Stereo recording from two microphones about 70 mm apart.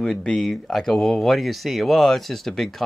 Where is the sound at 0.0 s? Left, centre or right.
Centre.